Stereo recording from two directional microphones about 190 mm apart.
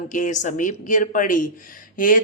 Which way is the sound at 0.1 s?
40° left (ahead or behind).